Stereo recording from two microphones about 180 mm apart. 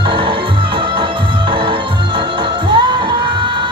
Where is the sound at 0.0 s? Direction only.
30° right (ahead or behind).